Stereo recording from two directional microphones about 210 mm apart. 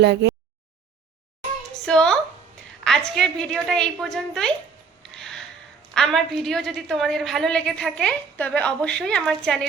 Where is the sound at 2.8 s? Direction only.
5° left (ahead or behind).